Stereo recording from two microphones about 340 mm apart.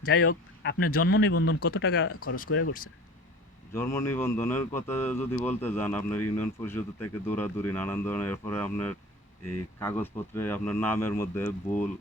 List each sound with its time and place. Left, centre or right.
0.1 s speech: left
3.7 s speech: centre